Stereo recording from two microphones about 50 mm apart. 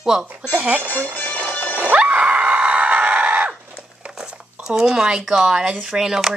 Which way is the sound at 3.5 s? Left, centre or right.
Centre.